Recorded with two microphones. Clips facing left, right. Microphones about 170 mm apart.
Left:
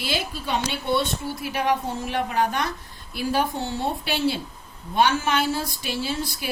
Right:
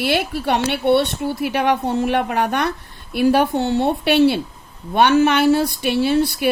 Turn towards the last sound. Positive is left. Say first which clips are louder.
# right 12 dB
turn(degrees=-65)  # may be behind; listen again after turning